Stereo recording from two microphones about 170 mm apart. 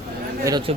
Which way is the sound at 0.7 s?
35° right (ahead or behind).